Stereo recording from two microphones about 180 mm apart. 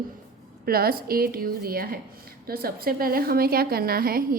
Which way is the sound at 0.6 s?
55° right (ahead or behind).